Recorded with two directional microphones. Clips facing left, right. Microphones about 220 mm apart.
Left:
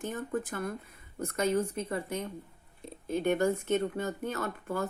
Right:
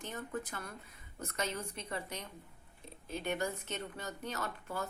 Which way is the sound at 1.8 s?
50° left (ahead or behind).